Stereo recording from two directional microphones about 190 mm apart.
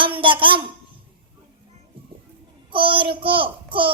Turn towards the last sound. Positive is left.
turn(degrees=-25)  # may be behind; listen again after turning